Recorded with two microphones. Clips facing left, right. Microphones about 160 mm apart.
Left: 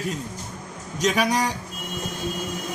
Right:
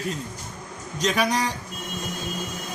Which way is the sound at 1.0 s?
5° left (ahead or behind).